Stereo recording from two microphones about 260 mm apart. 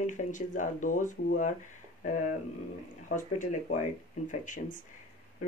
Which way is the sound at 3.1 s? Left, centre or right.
Left.